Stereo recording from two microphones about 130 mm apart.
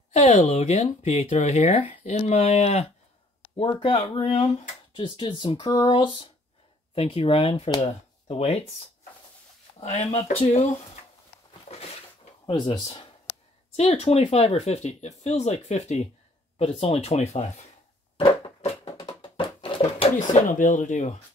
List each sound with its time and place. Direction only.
0.1 s speech: 60° left (ahead or behind)
9.8 s speech: 60° left (ahead or behind)
12.4 s speech: 40° left (ahead or behind)
13.7 s speech: 55° left (ahead or behind)
18.9 s a sound: 35° left (ahead or behind)
20.2 s speech: 85° left; by 21.1 s 65° left (ahead or behind)